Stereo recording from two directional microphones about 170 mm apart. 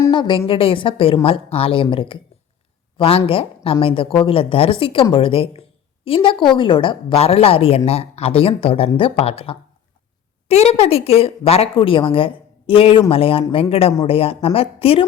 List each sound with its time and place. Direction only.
0.1 s speech: 30° left (ahead or behind)